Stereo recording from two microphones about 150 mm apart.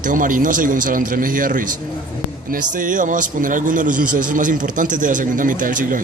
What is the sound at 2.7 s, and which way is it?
A man's voice, 60° right (ahead or behind).